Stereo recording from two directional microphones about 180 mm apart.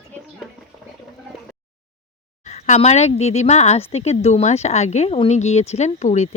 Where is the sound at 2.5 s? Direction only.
40° left (ahead or behind).